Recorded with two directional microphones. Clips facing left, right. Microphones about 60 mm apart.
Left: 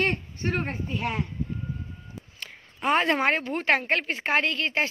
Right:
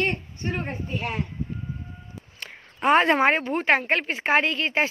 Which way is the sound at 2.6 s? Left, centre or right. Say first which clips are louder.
Right 5 dB; right.